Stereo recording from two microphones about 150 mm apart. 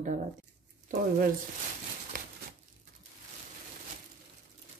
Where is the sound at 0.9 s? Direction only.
65° right (ahead or behind).